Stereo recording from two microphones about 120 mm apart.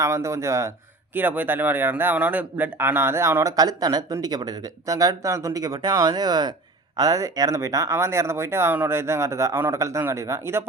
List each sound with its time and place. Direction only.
0.0 s a man's voice: 25° right (ahead or behind)